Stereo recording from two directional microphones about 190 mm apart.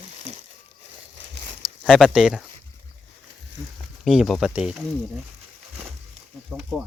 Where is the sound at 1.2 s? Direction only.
70° right (ahead or behind).